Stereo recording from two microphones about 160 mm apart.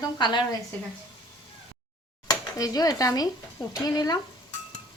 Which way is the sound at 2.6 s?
25° left (ahead or behind).